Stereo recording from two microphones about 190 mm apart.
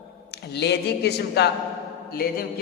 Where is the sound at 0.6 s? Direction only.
60° left (ahead or behind).